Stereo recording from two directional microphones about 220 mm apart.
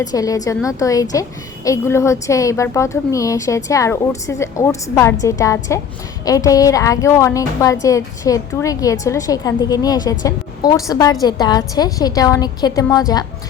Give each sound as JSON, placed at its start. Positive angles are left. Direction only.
{"t": 0.0, "sound": "a woman's voice", "side_deg": 15}